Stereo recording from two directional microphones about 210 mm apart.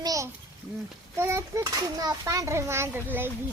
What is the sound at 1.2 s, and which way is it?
Speech, 15° right (ahead or behind).